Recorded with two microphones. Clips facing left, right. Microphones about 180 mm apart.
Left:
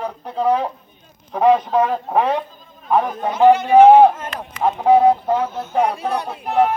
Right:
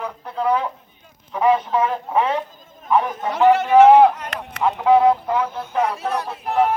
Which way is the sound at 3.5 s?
75° right (ahead or behind).